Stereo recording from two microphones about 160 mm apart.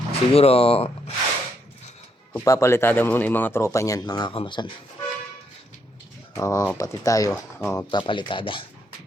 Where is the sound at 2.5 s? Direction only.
15° left (ahead or behind).